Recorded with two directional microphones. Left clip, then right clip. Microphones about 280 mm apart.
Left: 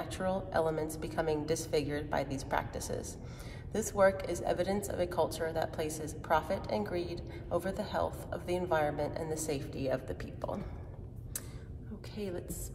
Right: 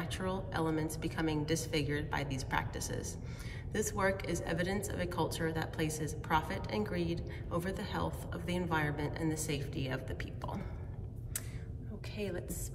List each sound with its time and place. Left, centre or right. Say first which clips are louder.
0.0 s a woman's voice: left 4 dB; left
12.2 s a woman's voice: even; centre